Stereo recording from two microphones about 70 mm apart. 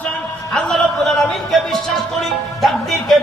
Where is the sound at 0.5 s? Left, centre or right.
Centre.